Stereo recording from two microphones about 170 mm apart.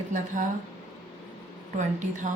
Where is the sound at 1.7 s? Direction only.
45° right (ahead or behind).